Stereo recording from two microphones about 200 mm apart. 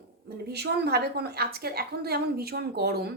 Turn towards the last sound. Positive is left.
turn(degrees=-50)  # may be behind; listen again after turning